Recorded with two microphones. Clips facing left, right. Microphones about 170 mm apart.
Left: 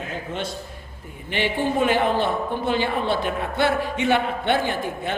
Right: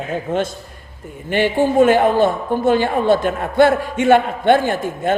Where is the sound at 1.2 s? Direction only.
45° right (ahead or behind).